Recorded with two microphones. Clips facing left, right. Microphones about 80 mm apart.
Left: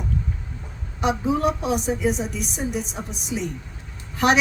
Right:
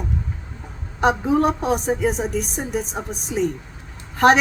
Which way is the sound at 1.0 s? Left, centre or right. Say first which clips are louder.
Right 4 dB; right.